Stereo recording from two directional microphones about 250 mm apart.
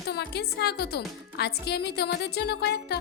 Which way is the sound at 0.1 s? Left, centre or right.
Left.